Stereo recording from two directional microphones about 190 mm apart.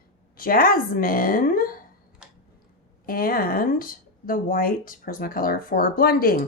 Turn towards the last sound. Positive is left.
turn(degrees=50)  # may be behind; listen again after turning